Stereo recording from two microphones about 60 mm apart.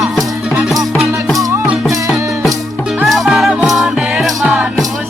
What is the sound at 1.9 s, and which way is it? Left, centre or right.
Music, centre.